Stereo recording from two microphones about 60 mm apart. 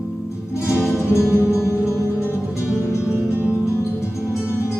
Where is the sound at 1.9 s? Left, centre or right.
Left.